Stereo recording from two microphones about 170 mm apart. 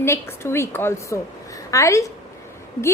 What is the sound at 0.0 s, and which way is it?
A woman's voice, 15° left (ahead or behind).